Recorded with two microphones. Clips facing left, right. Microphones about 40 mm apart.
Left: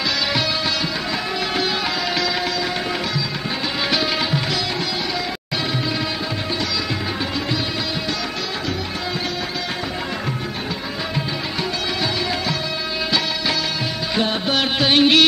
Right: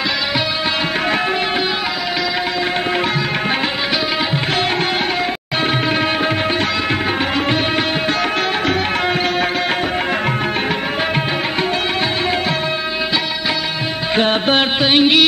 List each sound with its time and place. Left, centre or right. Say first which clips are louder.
14.1 s music: right 6 dB; right
14.8 s music: left 1 dB; centre